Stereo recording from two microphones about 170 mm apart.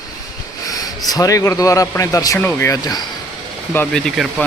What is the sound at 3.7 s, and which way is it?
Speech, 5° left (ahead or behind).